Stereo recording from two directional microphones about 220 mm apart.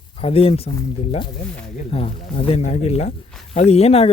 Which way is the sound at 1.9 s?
25° left (ahead or behind).